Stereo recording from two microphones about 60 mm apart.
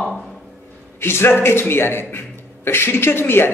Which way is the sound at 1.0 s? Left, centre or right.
Left.